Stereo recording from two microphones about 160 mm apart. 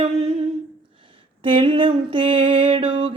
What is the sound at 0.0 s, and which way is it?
Humming, 35° right (ahead or behind).